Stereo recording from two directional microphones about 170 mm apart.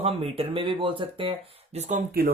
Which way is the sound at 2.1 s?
60° right (ahead or behind).